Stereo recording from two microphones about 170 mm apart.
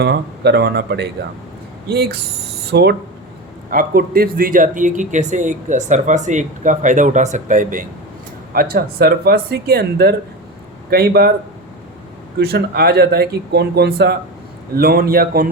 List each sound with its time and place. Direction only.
0.0 s speech: 80° right
2.7 s speech: 90° right
3.7 s speech: 60° right (ahead or behind)
8.5 s speech: 65° right (ahead or behind)
12.4 s speech: 70° right (ahead or behind)
14.8 s a man's voice: 60° right (ahead or behind)